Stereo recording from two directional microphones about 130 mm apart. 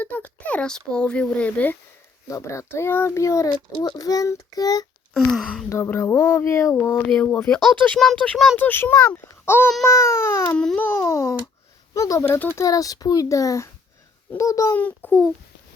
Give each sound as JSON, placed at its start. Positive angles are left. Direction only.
{"t": 0.0, "sound": "speech", "side_deg": 10}
{"t": 2.2, "sound": "a child's voice", "side_deg": 25}
{"t": 5.1, "sound": "speech", "side_deg": 5}
{"t": 5.6, "sound": "a child's voice", "side_deg": 20}
{"t": 6.9, "sound": "speech", "side_deg": 5}
{"t": 8.5, "sound": "a child's voice", "side_deg": 15}
{"t": 14.8, "sound": "speech", "side_deg": 10}